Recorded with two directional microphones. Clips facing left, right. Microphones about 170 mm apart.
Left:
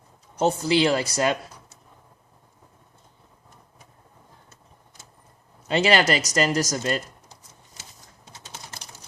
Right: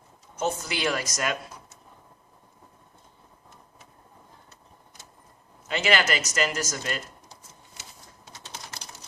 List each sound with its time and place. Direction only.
0.3 s speech: 35° left (ahead or behind)
5.6 s speech: 35° left (ahead or behind)